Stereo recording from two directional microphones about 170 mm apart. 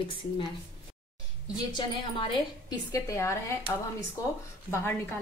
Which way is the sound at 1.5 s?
25° left (ahead or behind).